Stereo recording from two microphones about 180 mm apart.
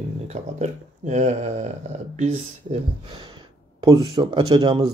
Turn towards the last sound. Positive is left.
turn(degrees=-25)  # may be behind; listen again after turning